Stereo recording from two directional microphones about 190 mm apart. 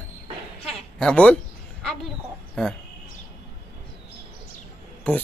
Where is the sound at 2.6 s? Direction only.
5° left (ahead or behind).